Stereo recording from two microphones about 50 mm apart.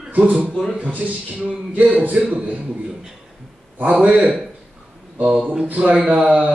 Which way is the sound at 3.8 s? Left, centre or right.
Right.